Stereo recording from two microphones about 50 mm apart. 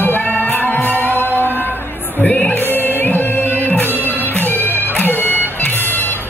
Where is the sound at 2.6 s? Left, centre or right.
Left.